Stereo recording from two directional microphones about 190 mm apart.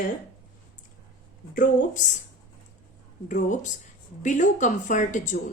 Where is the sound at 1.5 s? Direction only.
40° left (ahead or behind).